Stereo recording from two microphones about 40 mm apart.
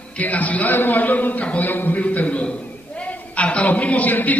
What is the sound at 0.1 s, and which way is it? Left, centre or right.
Speech, left.